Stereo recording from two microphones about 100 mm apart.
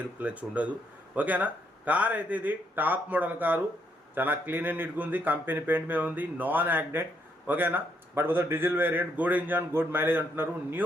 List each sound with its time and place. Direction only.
0.2 s a man's voice: 15° right (ahead or behind)